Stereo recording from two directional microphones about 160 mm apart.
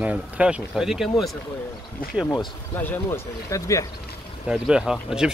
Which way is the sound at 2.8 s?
15° left (ahead or behind).